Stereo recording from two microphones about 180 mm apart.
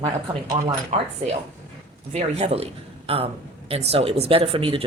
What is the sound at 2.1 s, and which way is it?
A man's voice, 35° right (ahead or behind).